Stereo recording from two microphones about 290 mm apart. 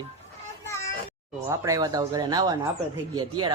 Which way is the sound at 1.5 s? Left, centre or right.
Centre.